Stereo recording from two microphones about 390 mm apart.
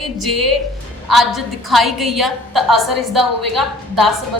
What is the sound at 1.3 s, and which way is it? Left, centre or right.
A woman's voice, centre.